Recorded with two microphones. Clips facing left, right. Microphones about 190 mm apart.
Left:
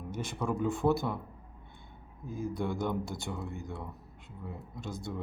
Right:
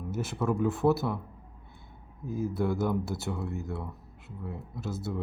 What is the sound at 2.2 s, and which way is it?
Speech, 5° right (ahead or behind).